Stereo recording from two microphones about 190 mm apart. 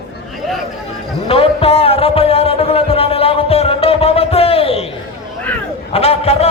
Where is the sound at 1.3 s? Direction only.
30° left (ahead or behind).